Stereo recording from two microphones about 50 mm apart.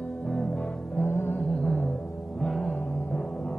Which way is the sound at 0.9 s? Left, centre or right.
Left.